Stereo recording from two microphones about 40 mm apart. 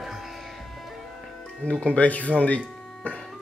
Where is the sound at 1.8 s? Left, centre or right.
Left.